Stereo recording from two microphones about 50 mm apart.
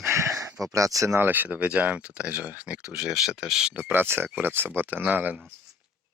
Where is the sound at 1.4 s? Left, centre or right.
Right.